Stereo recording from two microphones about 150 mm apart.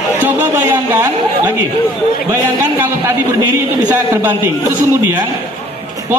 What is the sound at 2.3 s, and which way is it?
Speech, 15° right (ahead or behind).